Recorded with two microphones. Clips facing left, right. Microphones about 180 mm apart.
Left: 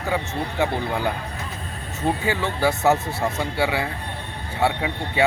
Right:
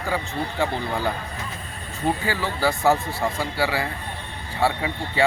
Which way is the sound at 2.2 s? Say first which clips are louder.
Left 2 dB; 20° left (ahead or behind).